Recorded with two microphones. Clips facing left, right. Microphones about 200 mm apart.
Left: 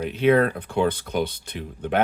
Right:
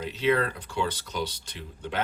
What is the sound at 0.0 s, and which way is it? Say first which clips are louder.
Speech: left 7 dB; 55° left (ahead or behind).